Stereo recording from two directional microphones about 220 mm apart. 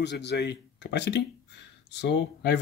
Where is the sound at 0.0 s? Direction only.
50° left (ahead or behind).